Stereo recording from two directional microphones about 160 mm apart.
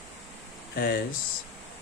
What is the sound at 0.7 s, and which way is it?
Speech, 75° left (ahead or behind).